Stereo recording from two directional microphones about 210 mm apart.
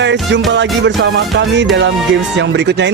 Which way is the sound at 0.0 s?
60° right (ahead or behind).